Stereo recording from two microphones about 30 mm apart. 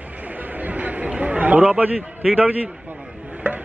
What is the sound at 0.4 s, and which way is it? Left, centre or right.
Chatter, right.